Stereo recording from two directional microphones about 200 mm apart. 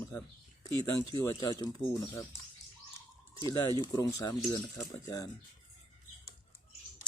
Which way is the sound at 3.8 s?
15° left (ahead or behind).